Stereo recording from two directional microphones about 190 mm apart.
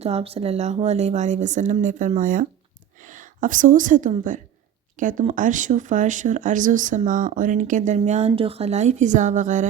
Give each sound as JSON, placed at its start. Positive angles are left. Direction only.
{"t": 0.0, "sound": "speech", "side_deg": -30}